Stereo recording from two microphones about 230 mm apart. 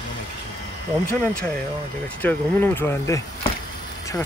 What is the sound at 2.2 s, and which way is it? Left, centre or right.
Speech, centre.